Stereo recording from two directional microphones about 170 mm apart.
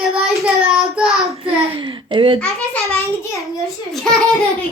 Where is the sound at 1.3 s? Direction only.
30° right (ahead or behind).